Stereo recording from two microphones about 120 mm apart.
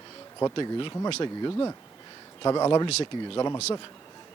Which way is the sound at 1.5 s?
25° left (ahead or behind).